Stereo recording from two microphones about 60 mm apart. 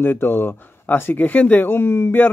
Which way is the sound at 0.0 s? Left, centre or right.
Left.